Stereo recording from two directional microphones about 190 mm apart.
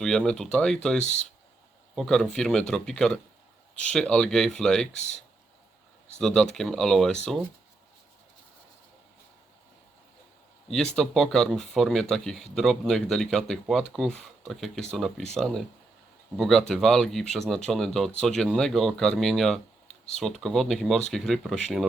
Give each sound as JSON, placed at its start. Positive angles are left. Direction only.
{"t": 0.0, "sound": "speech", "side_deg": 0}
{"t": 1.0, "sound": "speech", "side_deg": 35}
{"t": 2.0, "sound": "speech", "side_deg": 0}
{"t": 6.1, "sound": "speech", "side_deg": 5}
{"t": 10.7, "sound": "speech", "side_deg": 0}